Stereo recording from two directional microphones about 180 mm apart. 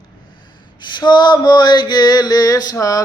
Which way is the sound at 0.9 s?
25° left (ahead or behind).